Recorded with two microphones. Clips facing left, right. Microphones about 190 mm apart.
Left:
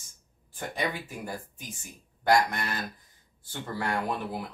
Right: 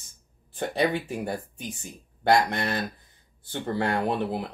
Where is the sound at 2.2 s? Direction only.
30° right (ahead or behind).